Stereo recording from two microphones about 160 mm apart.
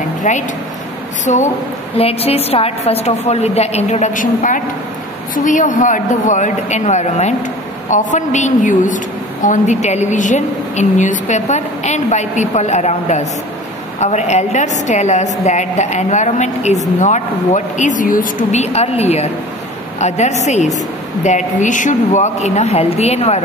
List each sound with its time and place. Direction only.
1.2 s a woman's voice: 50° left (ahead or behind)
2.0 s a woman's voice: 40° left (ahead or behind)